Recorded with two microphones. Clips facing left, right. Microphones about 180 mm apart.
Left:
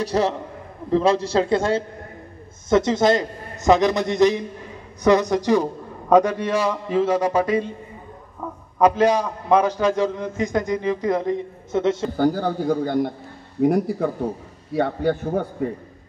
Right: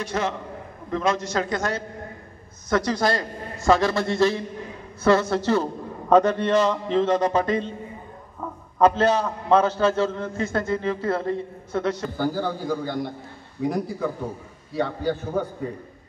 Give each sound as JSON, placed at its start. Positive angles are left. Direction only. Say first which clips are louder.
{"t": 0.0, "sound": "a man's voice", "louder": "left 5 dB", "side_deg": 35}
{"t": 8.7, "sound": "a man's voice", "louder": "left 2 dB", "side_deg": 10}
{"t": 12.2, "sound": "a man's voice", "louder": "left 5 dB", "side_deg": 45}